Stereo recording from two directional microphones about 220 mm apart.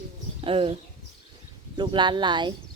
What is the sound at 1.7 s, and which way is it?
Speech, 20° right (ahead or behind).